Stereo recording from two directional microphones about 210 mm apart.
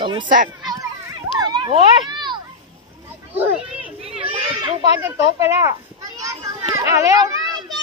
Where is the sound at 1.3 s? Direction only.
20° right (ahead or behind).